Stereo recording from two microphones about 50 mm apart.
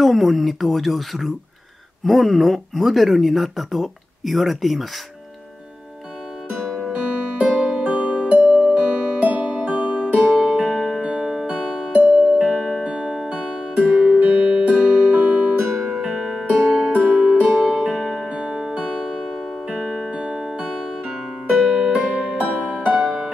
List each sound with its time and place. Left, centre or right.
0.0 s speech: centre
6.9 s music: right
8.7 s music: right; by 11.1 s centre
11.1 s music: centre
16.0 s music: centre
17.7 s music: centre
18.3 s music: centre
22.1 s music: right
23.0 s music: centre